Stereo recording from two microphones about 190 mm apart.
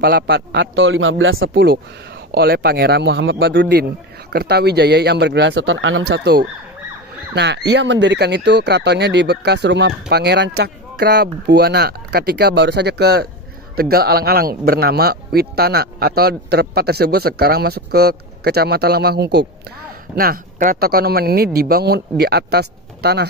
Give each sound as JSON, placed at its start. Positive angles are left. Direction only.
{"t": 0.0, "sound": "a man's voice", "side_deg": -55}
{"t": 1.5, "sound": "speech", "side_deg": -55}
{"t": 6.0, "sound": "speech", "side_deg": -55}
{"t": 20.2, "sound": "speech", "side_deg": -45}